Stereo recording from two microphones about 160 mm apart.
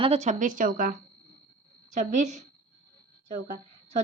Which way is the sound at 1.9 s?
50° right (ahead or behind).